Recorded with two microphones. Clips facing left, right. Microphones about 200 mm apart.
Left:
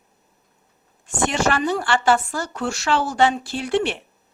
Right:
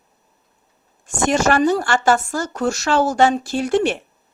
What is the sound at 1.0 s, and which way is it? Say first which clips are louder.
Speech: right 4 dB; 45° right (ahead or behind).